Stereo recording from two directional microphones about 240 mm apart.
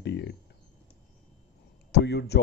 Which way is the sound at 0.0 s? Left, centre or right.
Left.